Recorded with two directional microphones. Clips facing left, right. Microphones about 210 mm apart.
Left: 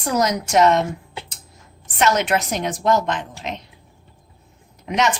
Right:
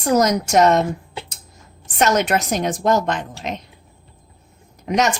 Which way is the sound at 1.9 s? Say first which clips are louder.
Right 1 dB; 45° right (ahead or behind).